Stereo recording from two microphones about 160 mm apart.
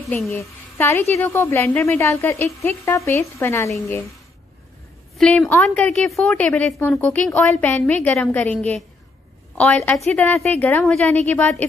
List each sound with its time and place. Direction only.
0.3 s a woman's voice: 15° left (ahead or behind)
5.1 s a woman's voice: centre (ahead or behind)